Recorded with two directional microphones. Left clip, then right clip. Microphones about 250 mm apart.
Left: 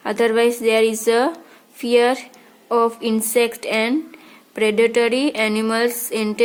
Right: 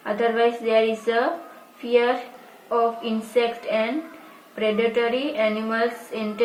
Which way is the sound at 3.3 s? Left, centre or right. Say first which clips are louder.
Left 2 dB; left.